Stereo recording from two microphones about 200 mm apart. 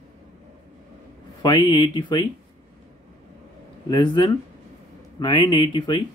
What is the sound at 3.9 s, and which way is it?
Speech, 20° left (ahead or behind).